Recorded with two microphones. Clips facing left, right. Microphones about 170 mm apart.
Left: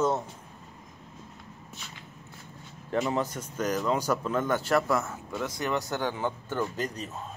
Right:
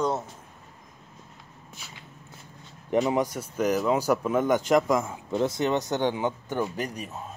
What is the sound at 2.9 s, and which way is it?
Speech, 15° right (ahead or behind).